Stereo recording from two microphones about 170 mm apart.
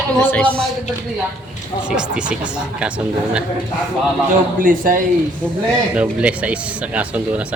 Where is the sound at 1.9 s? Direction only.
5° right (ahead or behind).